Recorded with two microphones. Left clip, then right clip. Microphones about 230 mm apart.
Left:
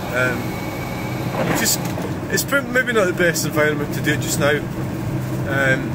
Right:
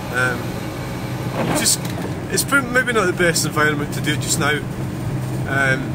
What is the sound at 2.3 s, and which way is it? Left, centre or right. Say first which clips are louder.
Speech: right 2 dB; centre.